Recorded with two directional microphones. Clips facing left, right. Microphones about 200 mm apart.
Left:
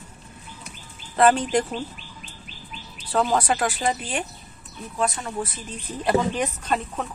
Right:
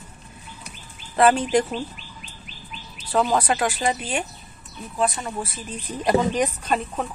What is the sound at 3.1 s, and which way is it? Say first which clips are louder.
Speech: right 1 dB; 5° right (ahead or behind).